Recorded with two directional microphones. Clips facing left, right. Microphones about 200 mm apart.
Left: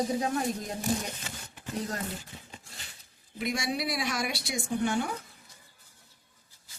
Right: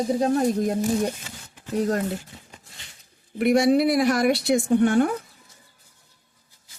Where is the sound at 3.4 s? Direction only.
65° right (ahead or behind).